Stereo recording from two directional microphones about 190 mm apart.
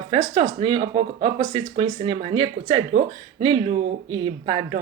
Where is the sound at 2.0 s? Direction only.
30° right (ahead or behind).